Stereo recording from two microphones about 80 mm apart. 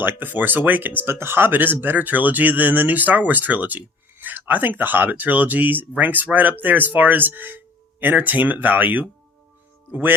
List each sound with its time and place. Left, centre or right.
0.0 s speech: right